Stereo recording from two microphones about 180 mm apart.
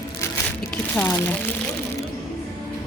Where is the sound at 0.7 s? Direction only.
5° left (ahead or behind).